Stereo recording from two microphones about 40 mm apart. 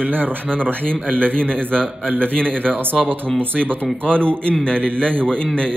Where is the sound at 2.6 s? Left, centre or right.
Right.